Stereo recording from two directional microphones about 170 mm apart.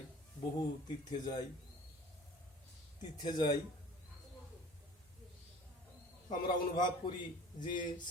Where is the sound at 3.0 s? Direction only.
25° left (ahead or behind).